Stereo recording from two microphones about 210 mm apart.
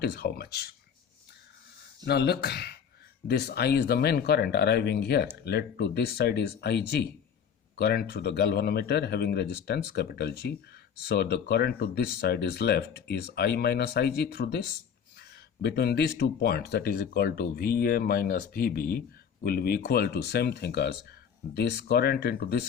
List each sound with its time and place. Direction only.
0.0 s speech: 50° left (ahead or behind)
2.0 s speech: 50° left (ahead or behind)